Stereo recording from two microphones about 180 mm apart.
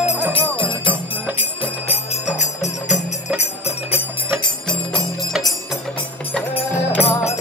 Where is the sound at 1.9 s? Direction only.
40° left (ahead or behind).